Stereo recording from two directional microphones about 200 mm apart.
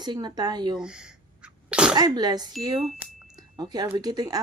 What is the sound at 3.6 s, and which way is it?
Speech, 20° right (ahead or behind).